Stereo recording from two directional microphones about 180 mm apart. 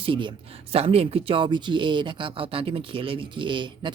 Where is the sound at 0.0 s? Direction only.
30° right (ahead or behind).